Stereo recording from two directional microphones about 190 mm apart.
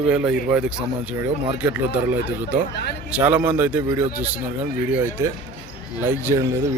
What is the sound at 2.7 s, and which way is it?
Speech, 60° left (ahead or behind).